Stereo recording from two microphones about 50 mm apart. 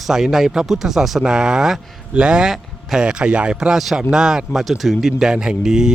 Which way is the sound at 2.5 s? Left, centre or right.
Centre.